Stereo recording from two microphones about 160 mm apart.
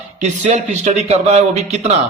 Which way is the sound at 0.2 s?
45° right (ahead or behind).